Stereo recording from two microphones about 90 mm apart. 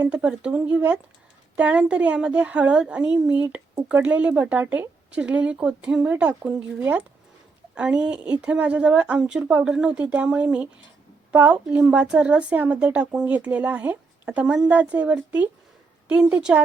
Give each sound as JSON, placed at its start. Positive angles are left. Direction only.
{"t": 0.1, "sound": "a woman's voice", "side_deg": -10}